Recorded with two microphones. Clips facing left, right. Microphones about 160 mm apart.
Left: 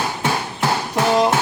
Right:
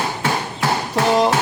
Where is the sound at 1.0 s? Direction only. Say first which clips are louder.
Even; centre (ahead or behind).